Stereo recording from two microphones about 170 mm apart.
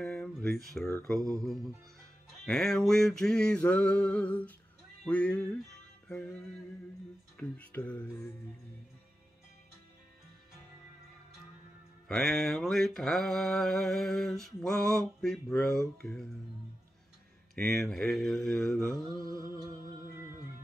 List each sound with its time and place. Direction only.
0.0 s a sound: centre (ahead or behind)
1.0 s mantra: 5° left (ahead or behind)
5.0 s speech: 10° left (ahead or behind)
6.0 s music: 10° left (ahead or behind)
7.3 s speech: 10° left (ahead or behind)
12.1 s mantra: centre (ahead or behind)
17.6 s mantra: centre (ahead or behind)
19.2 s music: 20° right (ahead or behind)